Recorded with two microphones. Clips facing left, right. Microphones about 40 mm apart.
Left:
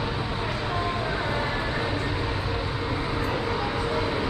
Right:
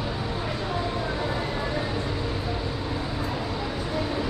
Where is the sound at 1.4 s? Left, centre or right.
Left.